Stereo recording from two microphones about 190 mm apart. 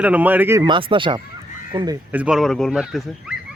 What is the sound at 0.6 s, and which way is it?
Speech, 25° right (ahead or behind).